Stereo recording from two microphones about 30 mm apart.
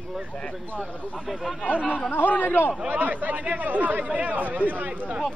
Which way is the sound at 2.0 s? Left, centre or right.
Left.